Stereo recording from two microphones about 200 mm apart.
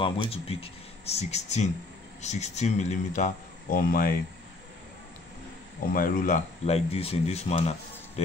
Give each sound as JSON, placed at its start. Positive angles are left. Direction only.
{"t": 0.0, "sound": "speech", "side_deg": 25}
{"t": 5.9, "sound": "speech", "side_deg": 45}